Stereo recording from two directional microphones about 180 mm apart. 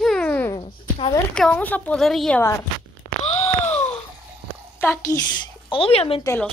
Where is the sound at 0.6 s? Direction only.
25° left (ahead or behind).